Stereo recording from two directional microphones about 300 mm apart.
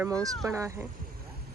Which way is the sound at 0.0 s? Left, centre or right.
Centre.